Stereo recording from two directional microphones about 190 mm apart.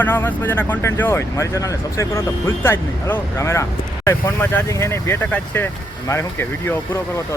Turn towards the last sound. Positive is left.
turn(degrees=10)  # may be behind; listen again after turning